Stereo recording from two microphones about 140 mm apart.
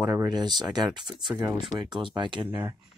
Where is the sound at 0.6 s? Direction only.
30° right (ahead or behind).